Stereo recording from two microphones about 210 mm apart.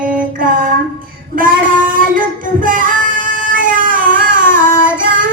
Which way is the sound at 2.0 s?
40° right (ahead or behind).